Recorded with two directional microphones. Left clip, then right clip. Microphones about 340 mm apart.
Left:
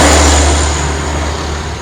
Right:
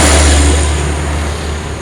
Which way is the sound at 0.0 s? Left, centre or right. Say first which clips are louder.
Left 2 dB; left.